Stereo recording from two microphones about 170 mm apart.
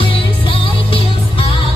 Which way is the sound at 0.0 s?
30° left (ahead or behind).